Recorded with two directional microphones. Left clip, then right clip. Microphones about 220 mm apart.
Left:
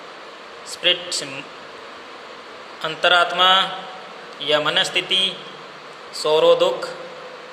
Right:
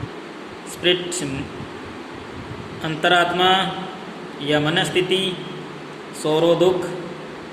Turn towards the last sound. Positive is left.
turn(degrees=20)  # may be behind; listen again after turning